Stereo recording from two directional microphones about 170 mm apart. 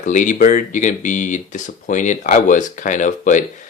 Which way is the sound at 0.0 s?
45° left (ahead or behind).